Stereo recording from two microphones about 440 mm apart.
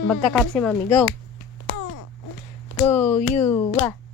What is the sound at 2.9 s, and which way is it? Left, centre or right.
Speech, centre.